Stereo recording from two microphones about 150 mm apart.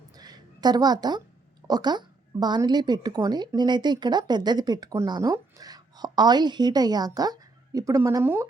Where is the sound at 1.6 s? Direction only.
25° right (ahead or behind).